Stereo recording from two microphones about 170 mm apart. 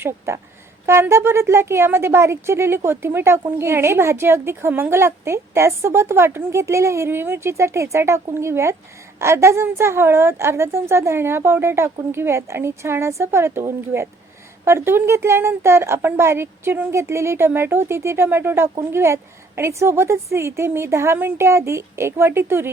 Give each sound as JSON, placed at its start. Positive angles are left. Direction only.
{"t": 0.3, "sound": "a woman's voice", "side_deg": -15}